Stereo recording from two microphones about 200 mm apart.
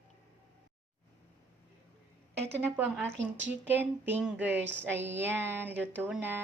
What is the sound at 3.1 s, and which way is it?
Speech, 65° right (ahead or behind).